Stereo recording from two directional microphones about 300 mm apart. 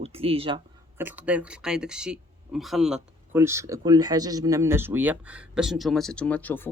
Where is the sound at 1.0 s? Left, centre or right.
Centre.